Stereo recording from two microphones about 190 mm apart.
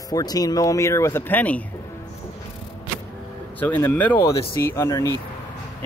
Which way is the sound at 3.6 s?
10° left (ahead or behind).